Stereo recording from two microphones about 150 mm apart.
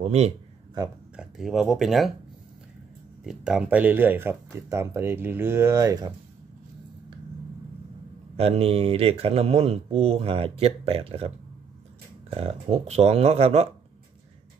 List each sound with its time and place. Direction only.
0.0 s a man's voice: 45° right (ahead or behind)
1.1 s speech: 5° right (ahead or behind)
3.3 s speech: 5° right (ahead or behind); by 6.1 s 25° right (ahead or behind)
8.4 s speech: 40° right (ahead or behind)